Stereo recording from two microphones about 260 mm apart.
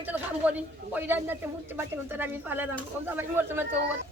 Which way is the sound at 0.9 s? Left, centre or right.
Centre.